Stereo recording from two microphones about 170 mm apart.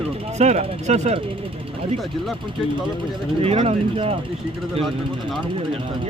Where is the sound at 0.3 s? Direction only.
40° right (ahead or behind).